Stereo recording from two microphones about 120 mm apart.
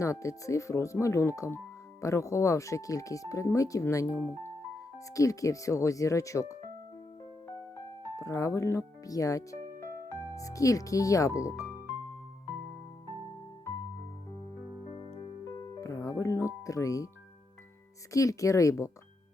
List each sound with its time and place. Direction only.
0.0 s speech: 25° left (ahead or behind)
8.1 s speech: 25° left (ahead or behind)
14.8 s music: 50° left (ahead or behind)
15.5 s music: 30° left (ahead or behind)
18.1 s speech: 25° left (ahead or behind)